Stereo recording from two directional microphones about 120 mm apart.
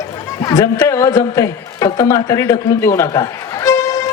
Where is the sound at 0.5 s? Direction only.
25° left (ahead or behind).